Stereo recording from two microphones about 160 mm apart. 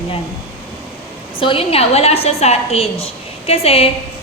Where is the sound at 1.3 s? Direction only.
35° left (ahead or behind).